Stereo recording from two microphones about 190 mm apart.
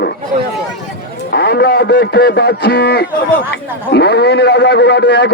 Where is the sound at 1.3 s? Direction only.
60° left (ahead or behind).